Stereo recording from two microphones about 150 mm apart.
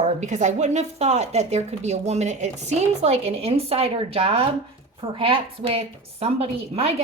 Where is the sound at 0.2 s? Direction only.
50° right (ahead or behind).